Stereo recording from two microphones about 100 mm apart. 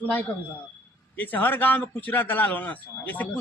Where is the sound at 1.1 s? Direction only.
20° left (ahead or behind).